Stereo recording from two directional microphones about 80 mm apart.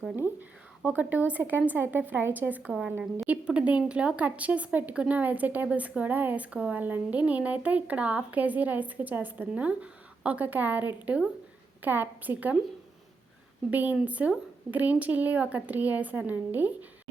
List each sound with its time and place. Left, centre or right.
0.9 s a woman's voice: right
13.7 s a woman's voice: right